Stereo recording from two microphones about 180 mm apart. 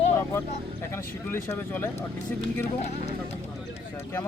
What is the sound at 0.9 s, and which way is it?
Speech, 15° left (ahead or behind).